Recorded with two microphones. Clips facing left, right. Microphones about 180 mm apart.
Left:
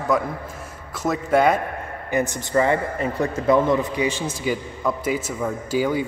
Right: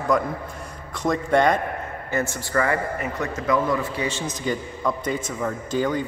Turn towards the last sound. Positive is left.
turn(degrees=10)  # may be behind; listen again after turning